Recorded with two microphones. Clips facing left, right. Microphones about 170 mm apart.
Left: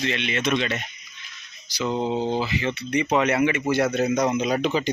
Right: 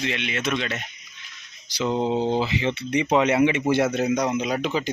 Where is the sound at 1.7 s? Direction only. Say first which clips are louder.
Right 1 dB; 20° right (ahead or behind).